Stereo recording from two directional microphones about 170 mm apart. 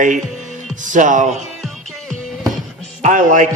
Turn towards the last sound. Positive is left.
turn(degrees=-50)  # may be behind; listen again after turning